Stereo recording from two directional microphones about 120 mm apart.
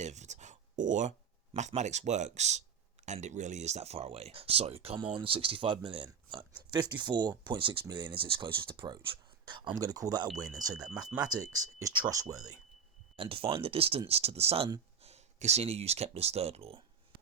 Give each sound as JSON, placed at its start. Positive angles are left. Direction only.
{"t": 0.0, "sound": "a sound", "side_deg": -75}
{"t": 1.5, "sound": "speech", "side_deg": -75}
{"t": 13.1, "sound": "speech", "side_deg": -50}